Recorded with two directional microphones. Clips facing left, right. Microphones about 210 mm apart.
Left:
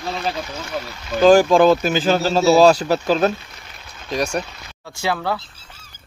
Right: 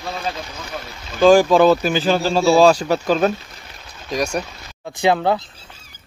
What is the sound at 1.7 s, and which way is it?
Speech, 10° right (ahead or behind).